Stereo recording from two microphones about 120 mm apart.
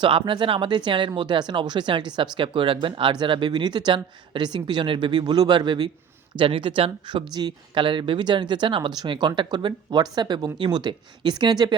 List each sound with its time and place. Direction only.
0.0 s speech: 45° right (ahead or behind)